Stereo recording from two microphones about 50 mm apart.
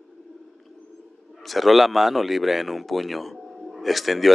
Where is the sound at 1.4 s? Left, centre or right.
Centre.